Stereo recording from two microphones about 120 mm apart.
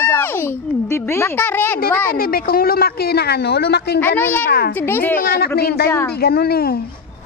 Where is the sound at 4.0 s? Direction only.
15° left (ahead or behind).